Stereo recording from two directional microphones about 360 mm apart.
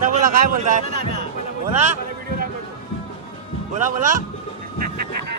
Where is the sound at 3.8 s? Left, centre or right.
Right.